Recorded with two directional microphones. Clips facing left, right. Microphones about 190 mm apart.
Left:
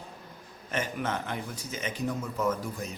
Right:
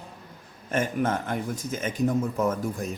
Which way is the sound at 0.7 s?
50° right (ahead or behind).